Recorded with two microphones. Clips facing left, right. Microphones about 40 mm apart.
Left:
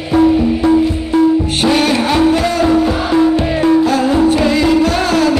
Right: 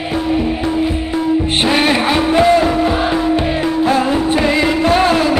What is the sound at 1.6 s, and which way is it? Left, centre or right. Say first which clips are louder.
Music: left 1 dB; right.